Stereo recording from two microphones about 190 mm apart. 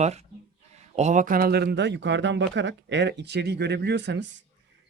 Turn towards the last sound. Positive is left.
turn(degrees=-65)  # may be behind; listen again after turning